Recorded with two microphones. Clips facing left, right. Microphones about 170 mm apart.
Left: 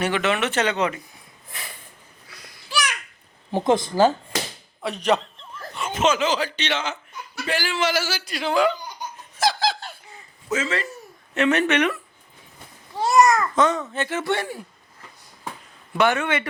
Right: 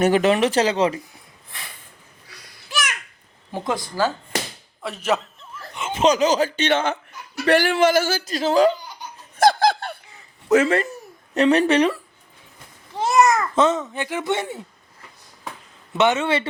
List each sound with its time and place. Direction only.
0.0 s speech: 40° right (ahead or behind)
3.5 s speech: 25° left (ahead or behind)
4.8 s speech: 5° right (ahead or behind)
5.7 s a sound: 20° right (ahead or behind)
6.0 s a man's voice: 40° right (ahead or behind)
9.4 s laughter: 55° right (ahead or behind)
10.5 s speech: 60° right (ahead or behind)
11.3 s speech: 35° right (ahead or behind)
13.0 s a child's voice: 20° right (ahead or behind)
16.0 s a man's voice: 20° right (ahead or behind)